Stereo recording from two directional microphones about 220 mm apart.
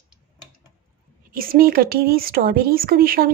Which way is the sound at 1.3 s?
40° right (ahead or behind).